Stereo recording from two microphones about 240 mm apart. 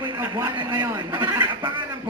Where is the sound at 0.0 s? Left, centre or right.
Centre.